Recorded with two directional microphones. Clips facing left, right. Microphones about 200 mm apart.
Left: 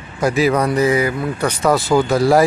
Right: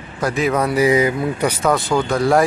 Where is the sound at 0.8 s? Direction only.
15° right (ahead or behind).